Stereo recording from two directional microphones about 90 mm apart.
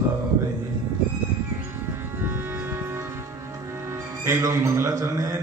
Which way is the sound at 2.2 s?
25° right (ahead or behind).